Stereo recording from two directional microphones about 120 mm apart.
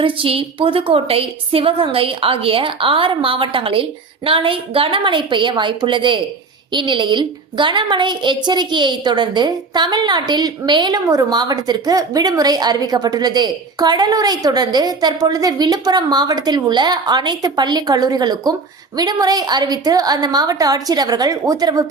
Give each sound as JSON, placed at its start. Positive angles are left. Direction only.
{"t": 0.0, "sound": "a woman's voice", "side_deg": -50}